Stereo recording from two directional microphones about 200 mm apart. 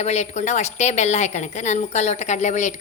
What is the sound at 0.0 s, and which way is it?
A woman's voice, 35° left (ahead or behind).